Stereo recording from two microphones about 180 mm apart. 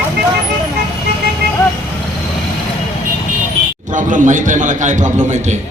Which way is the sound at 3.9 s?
45° right (ahead or behind).